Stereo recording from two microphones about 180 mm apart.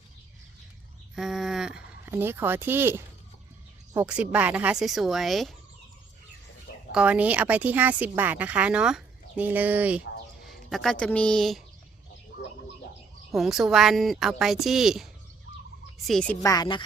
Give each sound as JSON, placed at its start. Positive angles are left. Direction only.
{"t": 1.1, "sound": "a sound", "side_deg": 0}
{"t": 3.9, "sound": "speech", "side_deg": -5}
{"t": 6.9, "sound": "speech", "side_deg": -5}
{"t": 13.3, "sound": "speech", "side_deg": 0}
{"t": 16.4, "sound": "speech", "side_deg": 20}